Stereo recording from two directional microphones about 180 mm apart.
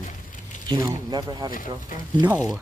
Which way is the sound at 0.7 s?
20° right (ahead or behind).